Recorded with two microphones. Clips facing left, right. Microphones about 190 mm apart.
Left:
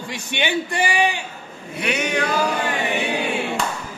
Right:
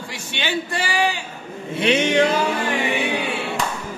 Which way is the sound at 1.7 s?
25° right (ahead or behind).